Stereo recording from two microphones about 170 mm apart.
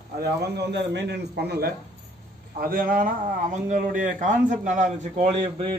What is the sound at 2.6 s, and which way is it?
A man's voice, 55° right (ahead or behind).